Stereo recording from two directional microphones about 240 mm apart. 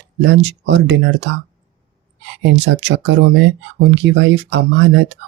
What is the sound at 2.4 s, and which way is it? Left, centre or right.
Speech, right.